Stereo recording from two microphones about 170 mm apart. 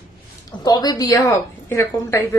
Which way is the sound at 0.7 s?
25° left (ahead or behind).